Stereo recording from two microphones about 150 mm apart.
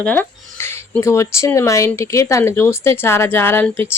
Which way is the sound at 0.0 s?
10° left (ahead or behind).